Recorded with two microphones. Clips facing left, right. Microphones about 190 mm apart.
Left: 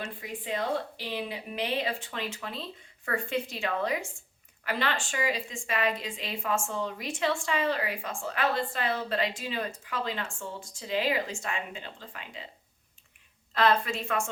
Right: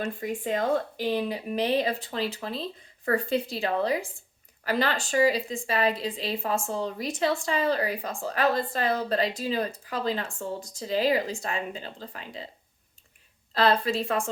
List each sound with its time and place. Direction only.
0.2 s a woman's voice: 45° right (ahead or behind)
13.5 s a woman's voice: 35° right (ahead or behind)